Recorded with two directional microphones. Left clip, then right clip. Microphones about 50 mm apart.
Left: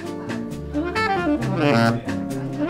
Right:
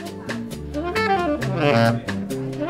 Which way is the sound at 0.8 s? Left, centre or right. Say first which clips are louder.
Right 1 dB; right.